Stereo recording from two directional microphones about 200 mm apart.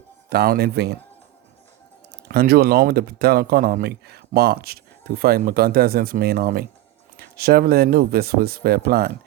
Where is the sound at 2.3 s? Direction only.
50° right (ahead or behind).